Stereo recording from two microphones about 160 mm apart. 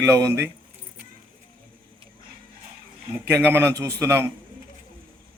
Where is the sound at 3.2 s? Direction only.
15° right (ahead or behind).